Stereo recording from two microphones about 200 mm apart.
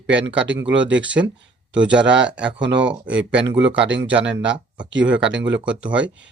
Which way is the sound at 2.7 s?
65° right (ahead or behind).